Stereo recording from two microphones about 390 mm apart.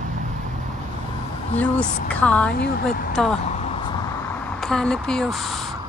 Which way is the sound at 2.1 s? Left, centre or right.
Centre.